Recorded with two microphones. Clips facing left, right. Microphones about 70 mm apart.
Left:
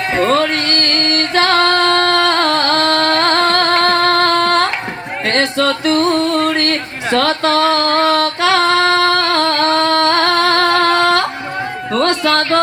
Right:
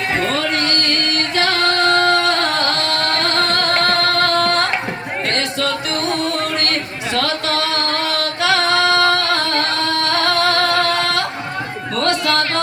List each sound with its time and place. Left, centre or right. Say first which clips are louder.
0.2 s music: left 5 dB; left
7.1 s female singing: left 6 dB; left
11.9 s music: left 4 dB; left